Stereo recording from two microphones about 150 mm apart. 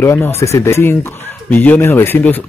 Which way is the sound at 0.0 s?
15° left (ahead or behind).